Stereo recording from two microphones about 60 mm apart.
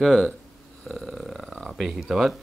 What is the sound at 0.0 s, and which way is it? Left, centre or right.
Speech, centre.